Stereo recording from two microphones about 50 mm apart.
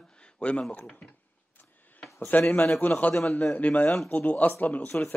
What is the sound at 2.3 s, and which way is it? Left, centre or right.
Speech, left.